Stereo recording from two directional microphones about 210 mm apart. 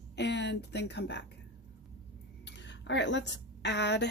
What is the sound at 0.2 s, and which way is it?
Speech, 55° left (ahead or behind).